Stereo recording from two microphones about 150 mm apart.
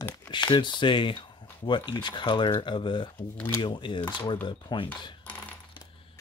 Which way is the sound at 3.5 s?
30° left (ahead or behind).